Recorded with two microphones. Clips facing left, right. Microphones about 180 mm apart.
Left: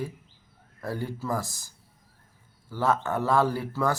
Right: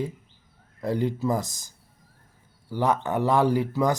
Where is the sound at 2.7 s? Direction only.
15° right (ahead or behind).